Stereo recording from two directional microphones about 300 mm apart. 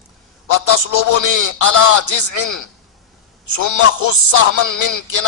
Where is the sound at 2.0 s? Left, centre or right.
Left.